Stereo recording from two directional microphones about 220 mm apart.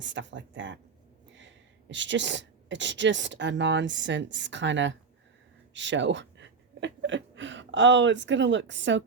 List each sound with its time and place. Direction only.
0.0 s speech: 55° right (ahead or behind)